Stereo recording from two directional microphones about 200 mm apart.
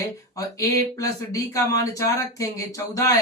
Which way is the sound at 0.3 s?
15° left (ahead or behind).